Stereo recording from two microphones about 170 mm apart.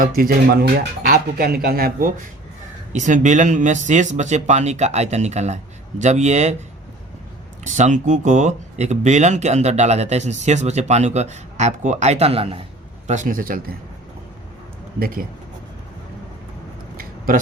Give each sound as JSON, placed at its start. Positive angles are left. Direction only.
{"t": 0.0, "sound": "speech", "side_deg": -60}
{"t": 7.6, "sound": "speech", "side_deg": -45}
{"t": 13.1, "sound": "speech", "side_deg": -50}
{"t": 14.9, "sound": "speech", "side_deg": -60}
{"t": 17.0, "sound": "a sound", "side_deg": -55}